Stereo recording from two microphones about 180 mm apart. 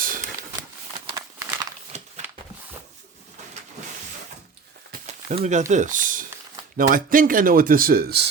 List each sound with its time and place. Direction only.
1.1 s crumpling: 20° right (ahead or behind)
5.0 s speech: 35° right (ahead or behind); by 8.2 s 55° right (ahead or behind)